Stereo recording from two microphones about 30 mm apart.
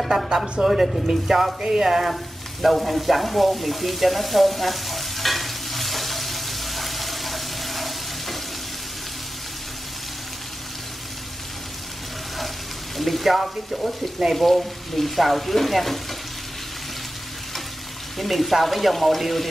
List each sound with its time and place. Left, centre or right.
0.6 s a sound: centre
1.6 s speech: right
1.9 s a sound: centre
2.6 s frying: centre
12.9 s speech: centre
18.1 s speech: centre